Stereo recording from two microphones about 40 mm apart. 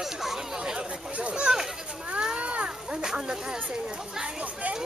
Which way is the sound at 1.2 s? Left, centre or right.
Right.